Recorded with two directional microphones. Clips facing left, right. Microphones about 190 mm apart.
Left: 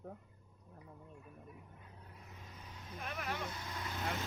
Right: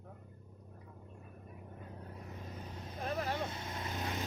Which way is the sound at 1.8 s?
45° right (ahead or behind).